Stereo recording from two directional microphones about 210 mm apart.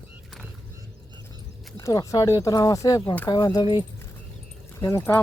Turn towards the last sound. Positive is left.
turn(degrees=10)  # may be behind; listen again after turning